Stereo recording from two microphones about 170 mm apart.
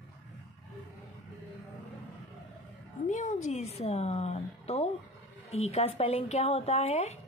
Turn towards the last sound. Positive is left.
turn(degrees=40)  # may be behind; listen again after turning